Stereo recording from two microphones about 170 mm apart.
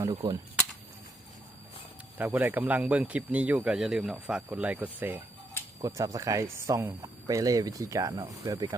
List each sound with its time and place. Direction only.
0.1 s speech: 25° right (ahead or behind)
2.1 s speech: 10° right (ahead or behind)